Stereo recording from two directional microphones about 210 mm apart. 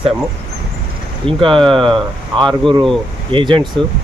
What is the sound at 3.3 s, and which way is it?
Speech, 25° right (ahead or behind).